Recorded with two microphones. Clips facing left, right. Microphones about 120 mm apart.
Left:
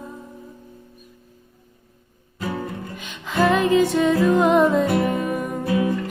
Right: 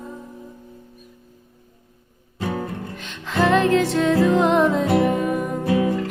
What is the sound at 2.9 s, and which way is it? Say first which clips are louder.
Music: left 1 dB; 5° left (ahead or behind).